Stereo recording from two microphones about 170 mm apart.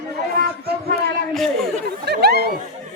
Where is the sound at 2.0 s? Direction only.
70° right (ahead or behind).